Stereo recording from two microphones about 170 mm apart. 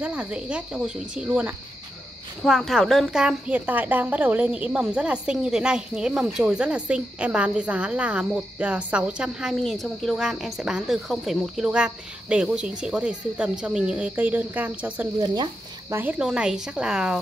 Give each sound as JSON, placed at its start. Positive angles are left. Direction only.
{"t": 0.0, "sound": "a woman's voice", "side_deg": -10}
{"t": 15.1, "sound": "speech", "side_deg": -25}
{"t": 15.9, "sound": "a woman's voice", "side_deg": -10}